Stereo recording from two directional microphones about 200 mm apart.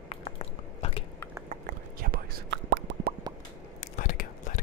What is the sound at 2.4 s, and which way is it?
Plop, 65° right (ahead or behind).